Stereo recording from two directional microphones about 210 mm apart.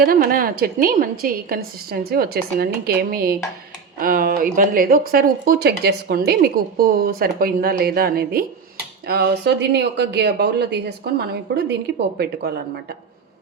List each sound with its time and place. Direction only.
0.0 s speech: 45° right (ahead or behind)